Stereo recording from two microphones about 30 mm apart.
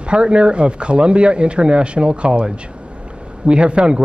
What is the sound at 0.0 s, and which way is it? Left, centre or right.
A man's voice, right.